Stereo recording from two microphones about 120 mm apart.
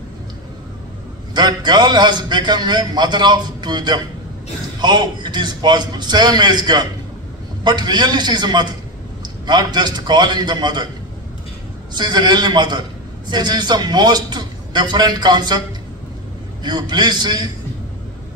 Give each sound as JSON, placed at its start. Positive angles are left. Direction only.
{"t": 1.3, "sound": "a man's voice", "side_deg": -40}
{"t": 11.9, "sound": "a man's voice", "side_deg": -35}
{"t": 16.6, "sound": "a man's voice", "side_deg": -40}